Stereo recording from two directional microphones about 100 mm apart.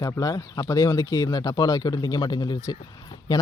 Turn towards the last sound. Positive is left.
turn(degrees=40)  # may be behind; listen again after turning